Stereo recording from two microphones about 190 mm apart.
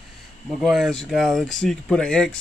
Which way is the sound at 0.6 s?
Centre (ahead or behind).